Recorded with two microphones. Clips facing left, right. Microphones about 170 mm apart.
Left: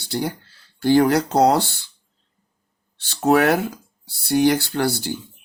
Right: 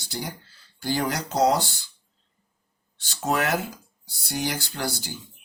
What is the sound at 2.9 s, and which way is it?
Speech, 65° left (ahead or behind).